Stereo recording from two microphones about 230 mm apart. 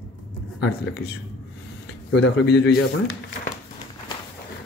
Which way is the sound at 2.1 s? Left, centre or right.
Left.